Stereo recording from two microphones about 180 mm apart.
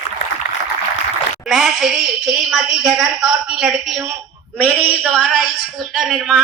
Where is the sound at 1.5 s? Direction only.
Centre (ahead or behind).